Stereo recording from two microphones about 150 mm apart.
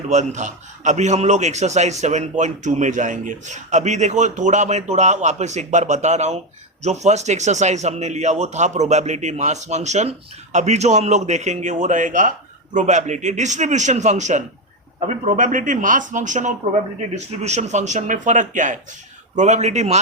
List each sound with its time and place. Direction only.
0.1 s a man's voice: 50° right (ahead or behind)